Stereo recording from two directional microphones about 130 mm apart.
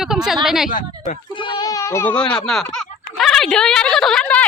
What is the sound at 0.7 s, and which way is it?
Speech, 90° left.